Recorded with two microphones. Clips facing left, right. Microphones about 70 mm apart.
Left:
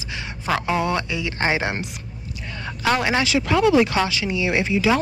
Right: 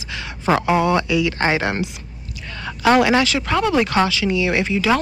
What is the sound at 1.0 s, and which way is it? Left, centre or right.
Speech, left.